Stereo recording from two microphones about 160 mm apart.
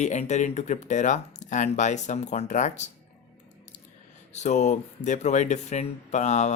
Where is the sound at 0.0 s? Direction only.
45° left (ahead or behind).